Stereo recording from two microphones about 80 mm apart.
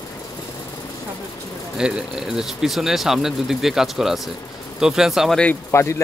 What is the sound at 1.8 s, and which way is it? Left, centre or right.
Speech, centre.